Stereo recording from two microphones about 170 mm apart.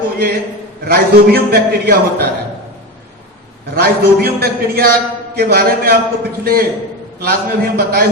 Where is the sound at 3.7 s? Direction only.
65° right (ahead or behind).